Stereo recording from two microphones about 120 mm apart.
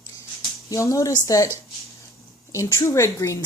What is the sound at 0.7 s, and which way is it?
Speech, 25° left (ahead or behind).